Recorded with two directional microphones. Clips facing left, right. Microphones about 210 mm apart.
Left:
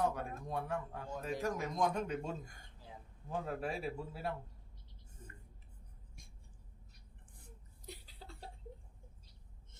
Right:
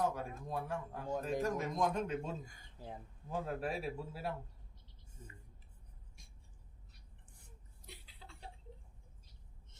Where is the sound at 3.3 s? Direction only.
Centre (ahead or behind).